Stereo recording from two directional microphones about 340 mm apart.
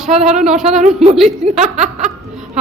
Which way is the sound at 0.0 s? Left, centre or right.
Centre.